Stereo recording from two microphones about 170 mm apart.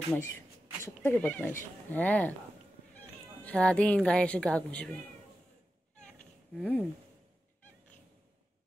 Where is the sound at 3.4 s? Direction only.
5° left (ahead or behind).